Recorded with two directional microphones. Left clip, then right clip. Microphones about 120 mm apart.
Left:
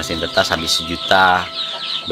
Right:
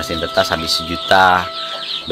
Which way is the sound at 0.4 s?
15° right (ahead or behind).